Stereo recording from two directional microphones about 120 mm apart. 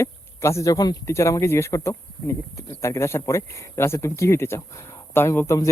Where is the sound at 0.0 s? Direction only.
25° left (ahead or behind).